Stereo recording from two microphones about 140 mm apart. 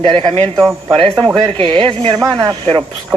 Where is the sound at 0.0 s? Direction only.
35° right (ahead or behind).